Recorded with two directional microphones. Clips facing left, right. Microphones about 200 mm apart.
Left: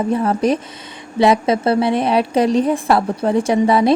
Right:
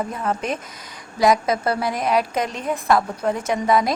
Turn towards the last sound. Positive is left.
turn(degrees=30)  # may be behind; listen again after turning